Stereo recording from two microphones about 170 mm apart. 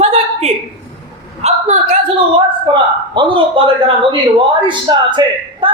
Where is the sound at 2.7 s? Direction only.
25° right (ahead or behind).